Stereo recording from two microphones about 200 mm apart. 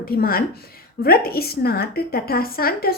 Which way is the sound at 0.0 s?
50° left (ahead or behind).